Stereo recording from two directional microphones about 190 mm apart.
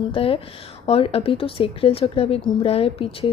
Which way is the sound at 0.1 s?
30° left (ahead or behind).